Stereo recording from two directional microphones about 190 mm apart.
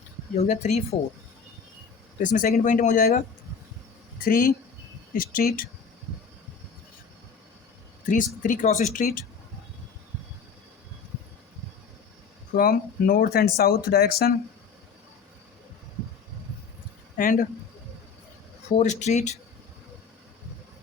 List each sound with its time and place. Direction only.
0.4 s speech: 35° left (ahead or behind)
2.2 s speech: 45° left (ahead or behind)
8.0 s speech: 45° left (ahead or behind)
12.5 s speech: 50° left (ahead or behind)
17.2 s speech: 45° left (ahead or behind)
18.8 s speech: 40° left (ahead or behind)